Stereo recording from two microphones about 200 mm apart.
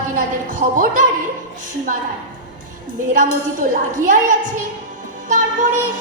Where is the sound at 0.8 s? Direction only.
45° right (ahead or behind).